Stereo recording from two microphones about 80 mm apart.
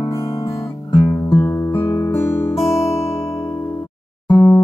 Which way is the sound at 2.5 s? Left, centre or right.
Centre.